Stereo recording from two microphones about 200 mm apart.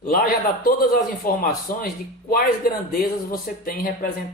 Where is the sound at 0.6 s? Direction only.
45° left (ahead or behind).